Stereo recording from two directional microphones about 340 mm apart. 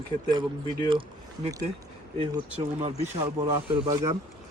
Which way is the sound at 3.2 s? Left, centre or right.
Centre.